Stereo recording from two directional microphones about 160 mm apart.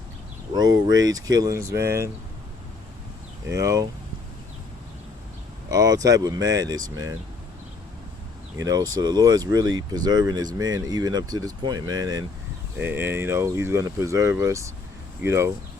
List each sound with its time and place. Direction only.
0.5 s speech: 25° right (ahead or behind)
3.6 s speech: 20° right (ahead or behind)
5.7 s speech: 20° right (ahead or behind)
8.5 s speech: 25° right (ahead or behind)
12.8 s speech: 15° right (ahead or behind)